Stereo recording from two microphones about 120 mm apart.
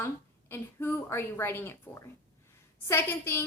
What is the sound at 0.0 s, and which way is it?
A woman's voice, 20° left (ahead or behind).